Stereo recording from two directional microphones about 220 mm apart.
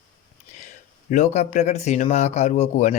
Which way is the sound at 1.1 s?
30° left (ahead or behind).